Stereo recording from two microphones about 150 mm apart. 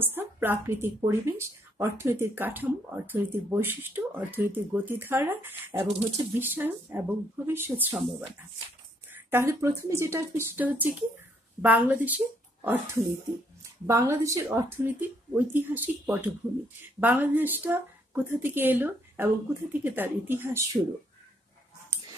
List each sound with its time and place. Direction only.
0.0 s a woman's voice: 15° right (ahead or behind)
9.1 s a woman's voice: 15° right (ahead or behind)